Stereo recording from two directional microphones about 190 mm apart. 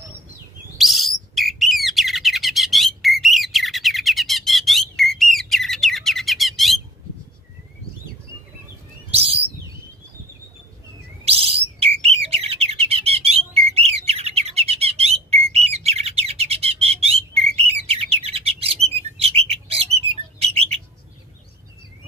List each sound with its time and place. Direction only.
0.7 s bird: centre (ahead or behind)
9.1 s bird: 30° right (ahead or behind)
11.2 s bird: 30° right (ahead or behind)